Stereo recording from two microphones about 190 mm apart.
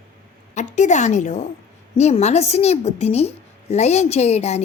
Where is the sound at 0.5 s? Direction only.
40° left (ahead or behind).